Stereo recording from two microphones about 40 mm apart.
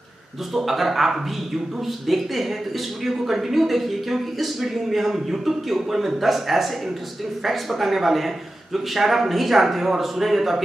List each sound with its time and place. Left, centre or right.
0.5 s speech: centre